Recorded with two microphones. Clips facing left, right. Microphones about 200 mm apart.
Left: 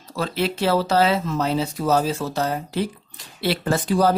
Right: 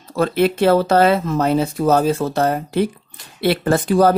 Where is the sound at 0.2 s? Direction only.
55° right (ahead or behind).